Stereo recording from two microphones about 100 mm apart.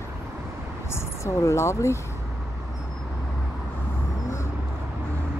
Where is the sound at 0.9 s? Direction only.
30° left (ahead or behind).